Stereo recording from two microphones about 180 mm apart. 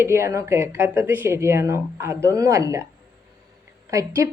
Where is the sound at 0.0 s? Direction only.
15° right (ahead or behind).